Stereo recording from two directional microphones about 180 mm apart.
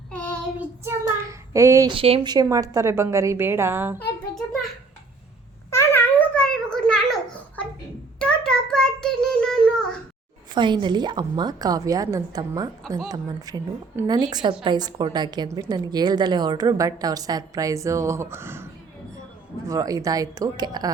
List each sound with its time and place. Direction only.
0.1 s child singing: 5° left (ahead or behind)
0.9 s child singing: 15° right (ahead or behind)
1.9 s a woman's voice: 30° right (ahead or behind); by 4.0 s 15° right (ahead or behind)
5.7 s a sound: 15° left (ahead or behind)
8.2 s child singing: 5° left (ahead or behind)
10.5 s a woman's voice: 25° right (ahead or behind)